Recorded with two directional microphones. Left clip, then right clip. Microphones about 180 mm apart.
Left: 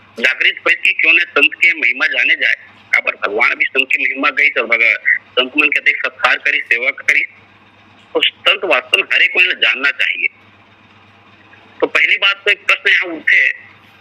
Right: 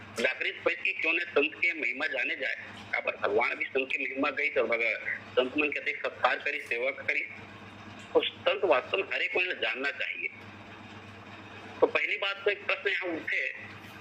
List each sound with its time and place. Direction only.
0.2 s a man's voice: 50° left (ahead or behind)
10.1 s a man's voice: 10° left (ahead or behind)
12.2 s a man's voice: 50° left (ahead or behind)